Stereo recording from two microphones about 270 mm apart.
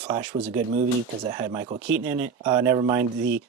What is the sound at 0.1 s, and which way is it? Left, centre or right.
Speech, centre.